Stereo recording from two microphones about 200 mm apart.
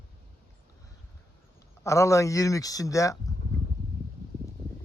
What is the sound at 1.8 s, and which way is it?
Speech, 15° left (ahead or behind).